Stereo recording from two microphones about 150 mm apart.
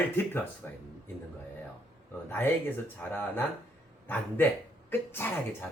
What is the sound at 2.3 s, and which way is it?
Speech, 15° left (ahead or behind).